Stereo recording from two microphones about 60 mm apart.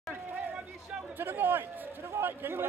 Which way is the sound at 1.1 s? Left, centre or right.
Right.